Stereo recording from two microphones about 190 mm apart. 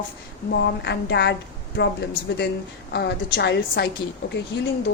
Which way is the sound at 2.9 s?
60° left (ahead or behind).